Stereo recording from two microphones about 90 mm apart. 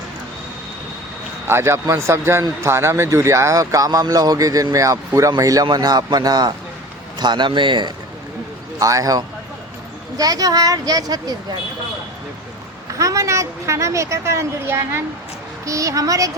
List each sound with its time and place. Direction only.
1.5 s a man's voice: 30° right (ahead or behind); by 7.9 s 60° right (ahead or behind)
8.8 s a man's voice: 40° right (ahead or behind)
12.9 s a woman's voice: 40° right (ahead or behind)